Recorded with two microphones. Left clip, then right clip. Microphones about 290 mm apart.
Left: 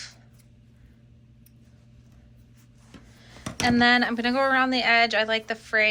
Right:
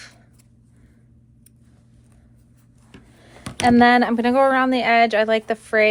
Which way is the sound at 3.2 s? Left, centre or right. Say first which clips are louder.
Right 5 dB; right.